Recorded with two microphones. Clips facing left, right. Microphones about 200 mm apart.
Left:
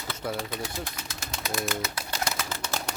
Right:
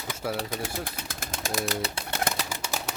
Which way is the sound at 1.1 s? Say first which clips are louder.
Right 2 dB; 50° right (ahead or behind).